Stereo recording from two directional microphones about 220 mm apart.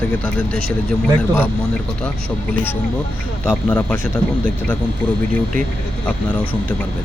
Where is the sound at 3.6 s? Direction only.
5° left (ahead or behind).